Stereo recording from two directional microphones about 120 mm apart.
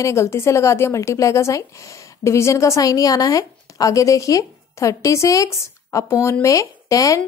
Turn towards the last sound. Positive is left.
turn(degrees=25)  # may be behind; listen again after turning